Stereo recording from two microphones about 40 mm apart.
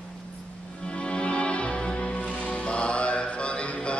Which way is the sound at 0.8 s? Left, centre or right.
Left.